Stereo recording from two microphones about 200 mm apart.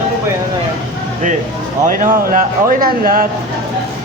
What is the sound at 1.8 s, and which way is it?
Speech, 40° right (ahead or behind).